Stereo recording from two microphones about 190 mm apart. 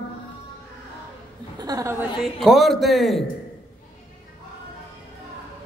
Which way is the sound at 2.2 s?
Centre (ahead or behind).